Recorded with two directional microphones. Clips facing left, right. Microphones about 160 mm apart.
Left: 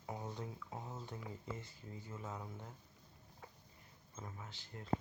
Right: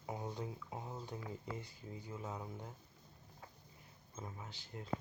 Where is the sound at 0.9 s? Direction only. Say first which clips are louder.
Right 2 dB; centre (ahead or behind).